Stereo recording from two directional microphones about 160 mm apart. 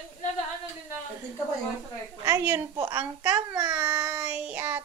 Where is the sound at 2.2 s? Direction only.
15° right (ahead or behind).